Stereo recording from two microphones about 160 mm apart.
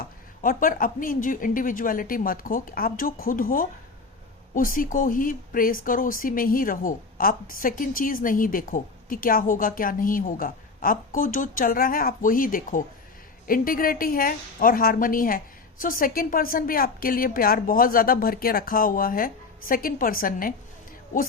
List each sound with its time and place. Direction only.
0.0 s speech: 60° left (ahead or behind)